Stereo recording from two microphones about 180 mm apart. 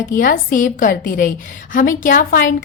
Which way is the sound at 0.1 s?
50° left (ahead or behind).